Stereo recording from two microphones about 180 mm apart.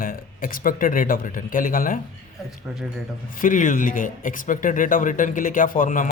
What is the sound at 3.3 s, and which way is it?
A man's voice, 45° left (ahead or behind).